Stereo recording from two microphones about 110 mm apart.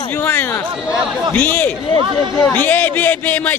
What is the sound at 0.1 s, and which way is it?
A man's voice, 20° left (ahead or behind).